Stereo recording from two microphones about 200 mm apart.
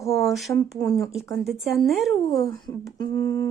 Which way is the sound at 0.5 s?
15° left (ahead or behind).